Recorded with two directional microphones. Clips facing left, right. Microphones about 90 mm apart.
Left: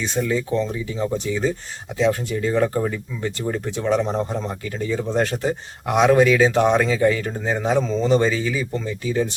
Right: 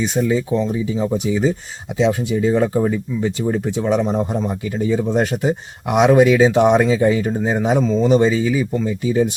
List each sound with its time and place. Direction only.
0.0 s speech: 15° right (ahead or behind)
7.9 s speech: 5° right (ahead or behind)
8.1 s speech: 15° right (ahead or behind)
8.7 s speech: 5° right (ahead or behind)